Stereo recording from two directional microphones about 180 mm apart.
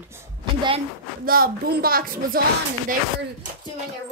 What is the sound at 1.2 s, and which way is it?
Speech, 55° right (ahead or behind).